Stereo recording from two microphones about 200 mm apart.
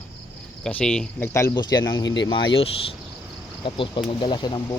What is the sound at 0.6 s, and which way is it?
Speech, 5° left (ahead or behind).